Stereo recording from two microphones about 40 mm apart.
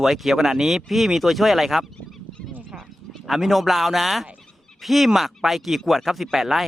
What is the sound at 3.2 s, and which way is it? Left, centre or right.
Speech, centre.